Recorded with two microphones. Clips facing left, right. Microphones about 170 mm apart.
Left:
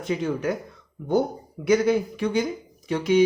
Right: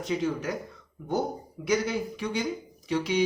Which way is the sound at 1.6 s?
55° left (ahead or behind).